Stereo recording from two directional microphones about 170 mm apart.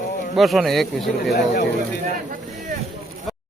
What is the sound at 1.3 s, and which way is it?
Speech, 60° left (ahead or behind).